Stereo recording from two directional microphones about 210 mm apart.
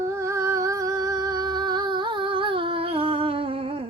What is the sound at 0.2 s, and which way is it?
Humming, 15° right (ahead or behind).